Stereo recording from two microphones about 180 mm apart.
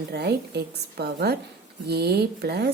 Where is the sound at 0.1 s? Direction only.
65° right (ahead or behind).